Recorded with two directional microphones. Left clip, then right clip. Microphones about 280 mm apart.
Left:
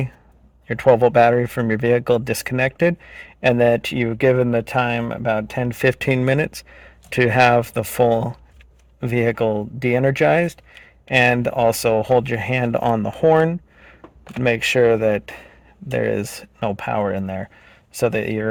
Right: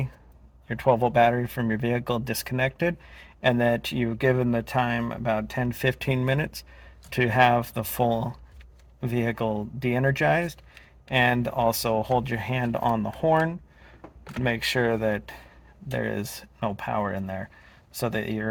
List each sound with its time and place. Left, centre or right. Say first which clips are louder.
0.7 s speech: left 8 dB; left